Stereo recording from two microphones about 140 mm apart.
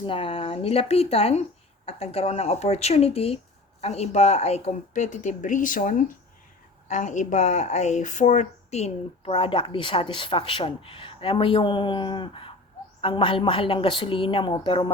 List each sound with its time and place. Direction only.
0.0 s speech: 40° left (ahead or behind); by 6.0 s 70° left (ahead or behind)
6.8 s speech: 60° left (ahead or behind); by 14.8 s 35° left (ahead or behind)